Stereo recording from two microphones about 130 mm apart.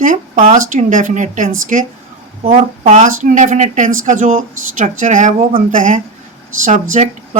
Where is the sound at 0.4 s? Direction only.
70° right (ahead or behind).